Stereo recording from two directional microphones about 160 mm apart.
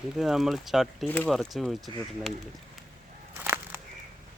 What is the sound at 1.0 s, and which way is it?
Speech, 10° left (ahead or behind).